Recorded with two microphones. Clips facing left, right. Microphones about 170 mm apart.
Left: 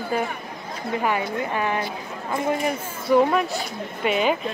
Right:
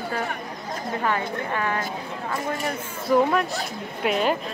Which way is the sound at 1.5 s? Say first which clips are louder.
Left 2 dB; 15° left (ahead or behind).